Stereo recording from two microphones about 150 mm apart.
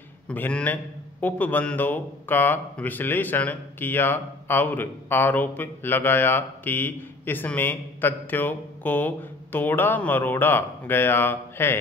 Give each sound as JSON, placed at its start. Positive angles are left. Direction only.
{"t": 0.3, "sound": "speech", "side_deg": 10}